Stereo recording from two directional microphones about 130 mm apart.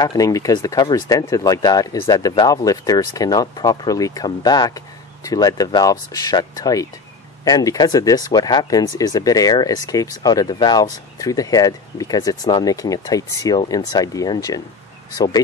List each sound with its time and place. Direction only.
0.2 s speech: 25° left (ahead or behind)